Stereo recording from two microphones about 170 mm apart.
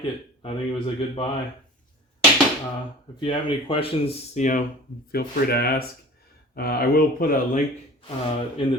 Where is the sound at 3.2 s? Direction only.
30° left (ahead or behind).